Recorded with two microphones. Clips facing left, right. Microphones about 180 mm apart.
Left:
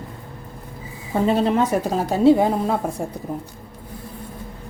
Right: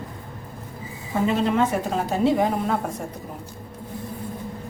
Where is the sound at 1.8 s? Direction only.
30° left (ahead or behind).